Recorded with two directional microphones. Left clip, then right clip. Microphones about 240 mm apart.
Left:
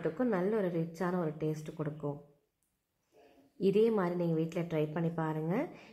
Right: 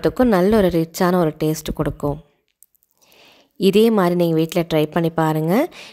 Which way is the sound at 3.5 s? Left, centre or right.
Right.